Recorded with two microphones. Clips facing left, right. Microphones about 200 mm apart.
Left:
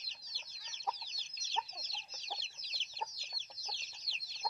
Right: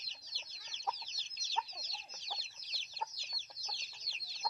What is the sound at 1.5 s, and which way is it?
Chicken, 25° left (ahead or behind).